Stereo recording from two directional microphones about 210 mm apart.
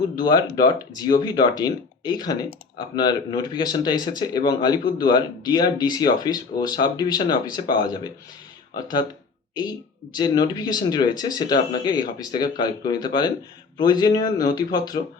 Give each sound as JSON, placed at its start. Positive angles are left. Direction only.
{"t": 0.2, "sound": "speech", "side_deg": 20}
{"t": 10.2, "sound": "speech", "side_deg": 20}